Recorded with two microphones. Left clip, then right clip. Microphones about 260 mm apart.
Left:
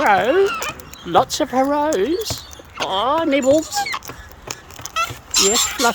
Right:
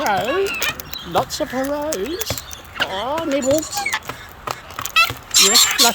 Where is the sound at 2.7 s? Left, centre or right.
Left.